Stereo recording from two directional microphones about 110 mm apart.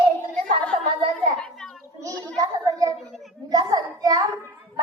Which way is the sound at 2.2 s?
30° right (ahead or behind).